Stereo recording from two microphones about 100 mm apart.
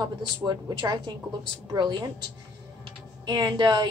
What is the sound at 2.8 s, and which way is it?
Typing, 45° right (ahead or behind).